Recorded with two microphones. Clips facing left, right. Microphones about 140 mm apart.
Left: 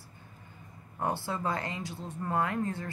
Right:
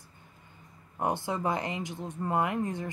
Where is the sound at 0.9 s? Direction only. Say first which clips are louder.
Right 2 dB; 20° right (ahead or behind).